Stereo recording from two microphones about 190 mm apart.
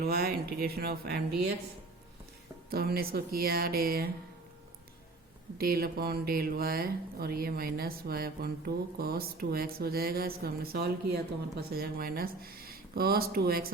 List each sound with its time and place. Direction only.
0.0 s speech: 55° right (ahead or behind)
2.6 s speech: 55° right (ahead or behind)
5.5 s speech: 50° right (ahead or behind)